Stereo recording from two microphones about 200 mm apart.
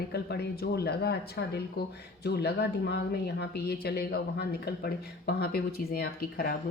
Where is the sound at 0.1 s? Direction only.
55° left (ahead or behind).